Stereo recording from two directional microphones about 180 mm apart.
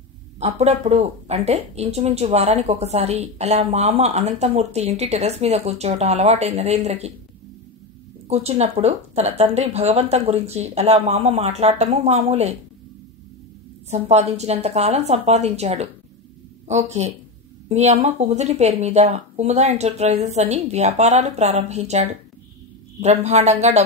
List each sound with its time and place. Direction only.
0.4 s speech: 35° right (ahead or behind)
8.3 s speech: 35° right (ahead or behind)
13.8 s speech: 40° right (ahead or behind)